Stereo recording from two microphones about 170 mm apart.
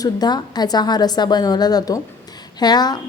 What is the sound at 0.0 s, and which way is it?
A woman's voice, 25° left (ahead or behind).